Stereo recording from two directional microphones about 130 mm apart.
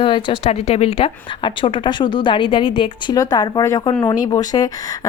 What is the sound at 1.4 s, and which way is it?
A woman's voice, 40° left (ahead or behind).